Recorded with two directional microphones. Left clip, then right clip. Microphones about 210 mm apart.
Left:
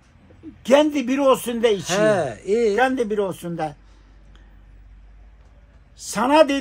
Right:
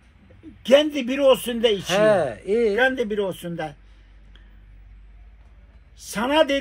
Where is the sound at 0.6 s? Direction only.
15° left (ahead or behind).